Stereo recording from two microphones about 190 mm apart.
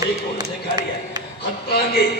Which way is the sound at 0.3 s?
20° right (ahead or behind).